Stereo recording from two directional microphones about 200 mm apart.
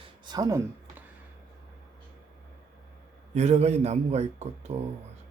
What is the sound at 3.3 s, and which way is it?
Speech, 35° right (ahead or behind).